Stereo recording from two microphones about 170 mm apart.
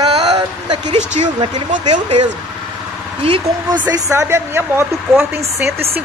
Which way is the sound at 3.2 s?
30° right (ahead or behind).